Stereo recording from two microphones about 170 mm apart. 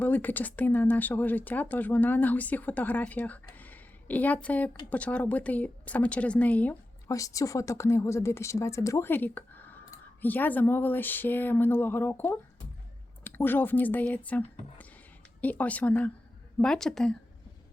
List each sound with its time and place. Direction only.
0.0 s speech: 10° left (ahead or behind)
7.1 s a woman's voice: 20° left (ahead or behind); by 17.2 s 5° left (ahead or behind)